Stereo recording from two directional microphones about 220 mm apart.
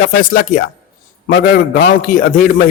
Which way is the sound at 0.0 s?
35° left (ahead or behind).